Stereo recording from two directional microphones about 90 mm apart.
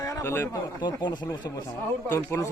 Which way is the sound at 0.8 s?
55° left (ahead or behind).